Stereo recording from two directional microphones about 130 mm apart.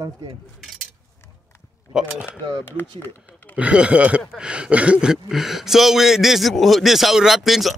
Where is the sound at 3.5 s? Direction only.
10° right (ahead or behind).